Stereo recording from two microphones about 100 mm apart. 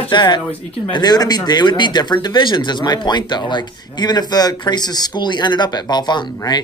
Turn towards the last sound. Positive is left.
turn(degrees=45)  # may be behind; listen again after turning